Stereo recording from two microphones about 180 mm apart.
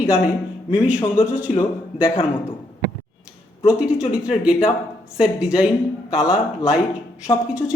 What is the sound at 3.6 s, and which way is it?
Speech, 5° right (ahead or behind).